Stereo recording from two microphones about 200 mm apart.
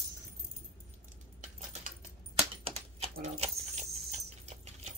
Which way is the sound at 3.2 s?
30° right (ahead or behind).